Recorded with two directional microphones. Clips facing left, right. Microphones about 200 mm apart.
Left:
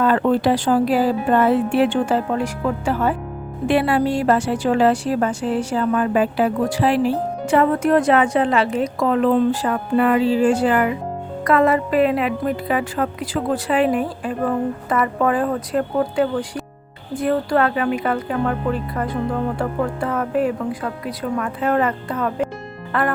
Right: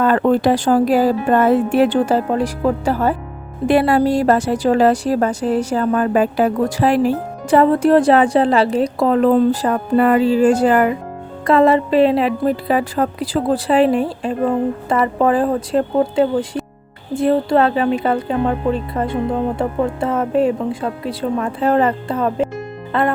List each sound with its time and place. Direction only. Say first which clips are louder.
0.0 s a woman's voice: right 2 dB; 50° right (ahead or behind)
11.4 s a woman's voice: right 4 dB; 30° right (ahead or behind)